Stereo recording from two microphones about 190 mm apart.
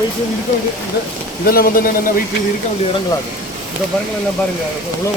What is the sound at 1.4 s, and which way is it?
Speech, 50° left (ahead or behind).